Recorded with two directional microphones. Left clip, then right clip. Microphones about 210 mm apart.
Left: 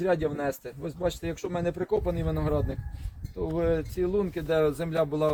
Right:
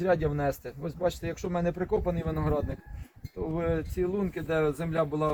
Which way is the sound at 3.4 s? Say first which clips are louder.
Left 3 dB; 65° left (ahead or behind).